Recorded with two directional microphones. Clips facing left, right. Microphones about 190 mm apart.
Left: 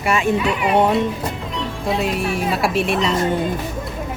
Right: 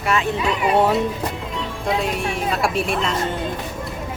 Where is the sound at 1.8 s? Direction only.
5° left (ahead or behind).